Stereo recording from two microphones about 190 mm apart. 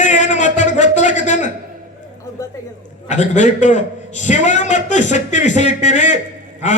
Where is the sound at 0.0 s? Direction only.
40° left (ahead or behind).